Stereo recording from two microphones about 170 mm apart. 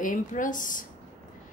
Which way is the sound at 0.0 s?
50° left (ahead or behind).